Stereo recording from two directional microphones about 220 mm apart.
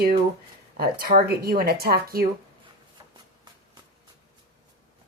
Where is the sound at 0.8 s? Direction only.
40° right (ahead or behind).